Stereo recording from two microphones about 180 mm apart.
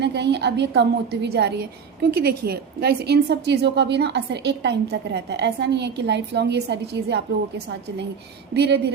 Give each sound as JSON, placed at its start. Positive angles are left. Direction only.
{"t": 0.0, "sound": "a woman's voice", "side_deg": -70}
{"t": 8.5, "sound": "a woman's voice", "side_deg": -70}